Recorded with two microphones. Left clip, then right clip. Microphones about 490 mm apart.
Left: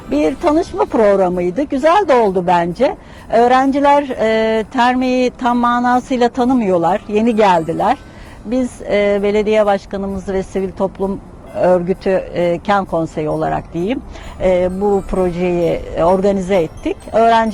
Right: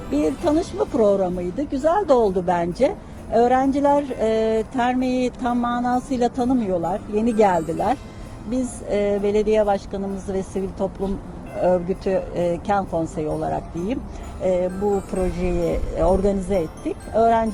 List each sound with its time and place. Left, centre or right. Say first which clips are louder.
0.1 s speech: left 6 dB; left